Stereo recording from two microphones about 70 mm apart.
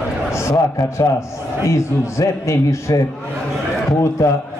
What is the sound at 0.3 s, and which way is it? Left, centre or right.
A man's voice, left.